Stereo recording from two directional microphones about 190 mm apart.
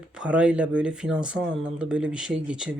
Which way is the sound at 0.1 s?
5° right (ahead or behind).